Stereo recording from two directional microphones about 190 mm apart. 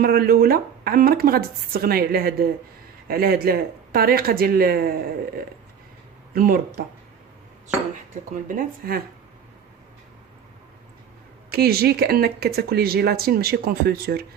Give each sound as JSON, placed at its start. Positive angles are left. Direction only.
{"t": 0.0, "sound": "a woman's voice", "side_deg": -55}
{"t": 8.1, "sound": "a woman's voice", "side_deg": -45}
{"t": 11.5, "sound": "speech", "side_deg": -55}